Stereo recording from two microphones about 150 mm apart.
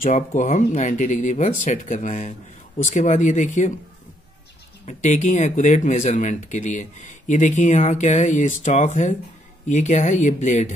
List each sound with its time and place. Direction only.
0.0 s speech: 60° left (ahead or behind)
4.8 s speech: 55° left (ahead or behind)